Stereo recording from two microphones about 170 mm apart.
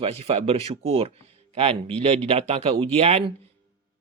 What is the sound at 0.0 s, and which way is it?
Speech, 35° right (ahead or behind).